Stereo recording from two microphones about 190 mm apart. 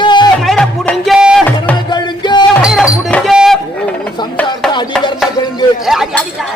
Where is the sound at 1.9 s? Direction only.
25° left (ahead or behind).